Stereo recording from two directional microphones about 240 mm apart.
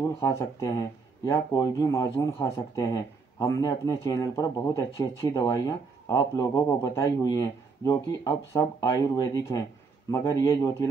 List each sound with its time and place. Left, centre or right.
0.0 s speech: centre